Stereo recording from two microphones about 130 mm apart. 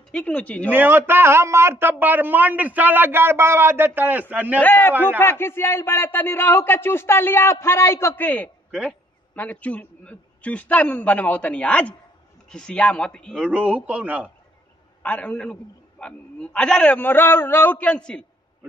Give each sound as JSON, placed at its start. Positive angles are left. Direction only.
{"t": 0.1, "sound": "a man's voice", "side_deg": 10}
{"t": 0.7, "sound": "a man's voice", "side_deg": -15}
{"t": 4.6, "sound": "a man's voice", "side_deg": 15}
{"t": 13.5, "sound": "a man's voice", "side_deg": -10}
{"t": 15.0, "sound": "a man's voice", "side_deg": 10}